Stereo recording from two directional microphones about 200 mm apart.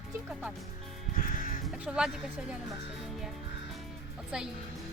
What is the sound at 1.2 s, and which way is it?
Caw, 45° left (ahead or behind).